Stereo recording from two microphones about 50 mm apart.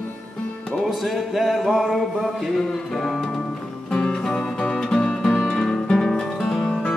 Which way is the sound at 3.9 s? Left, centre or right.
Centre.